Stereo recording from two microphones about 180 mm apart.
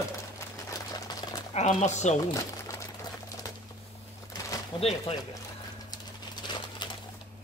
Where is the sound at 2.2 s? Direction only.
20° left (ahead or behind).